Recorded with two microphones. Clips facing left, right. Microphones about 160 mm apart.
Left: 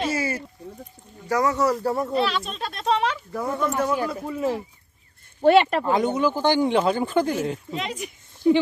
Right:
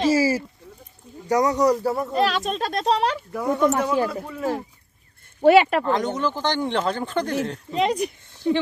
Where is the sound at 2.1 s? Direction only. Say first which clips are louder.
Right 2 dB; 45° right (ahead or behind).